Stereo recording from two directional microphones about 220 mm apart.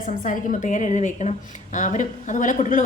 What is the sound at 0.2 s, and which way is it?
A woman's voice, 35° left (ahead or behind).